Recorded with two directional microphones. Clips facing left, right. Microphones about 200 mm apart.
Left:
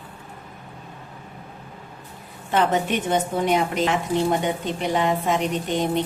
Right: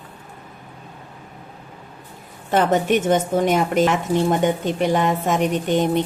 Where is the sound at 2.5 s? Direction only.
45° right (ahead or behind).